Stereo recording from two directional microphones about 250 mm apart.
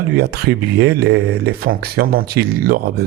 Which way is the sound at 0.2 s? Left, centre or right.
Right.